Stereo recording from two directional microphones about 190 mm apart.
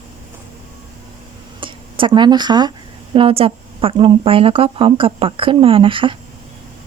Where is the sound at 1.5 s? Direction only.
25° right (ahead or behind).